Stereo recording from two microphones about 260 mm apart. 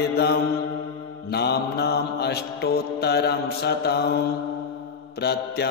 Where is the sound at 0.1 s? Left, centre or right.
Left.